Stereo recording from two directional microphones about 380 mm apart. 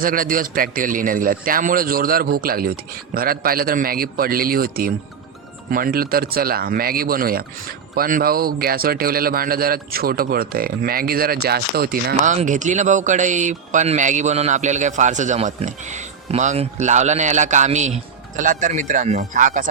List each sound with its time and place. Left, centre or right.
0.0 s a man's voice: right